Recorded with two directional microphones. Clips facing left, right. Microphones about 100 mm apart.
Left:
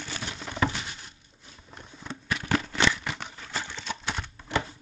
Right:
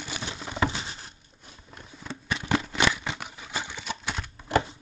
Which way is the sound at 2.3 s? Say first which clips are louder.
Right 1 dB; 15° right (ahead or behind).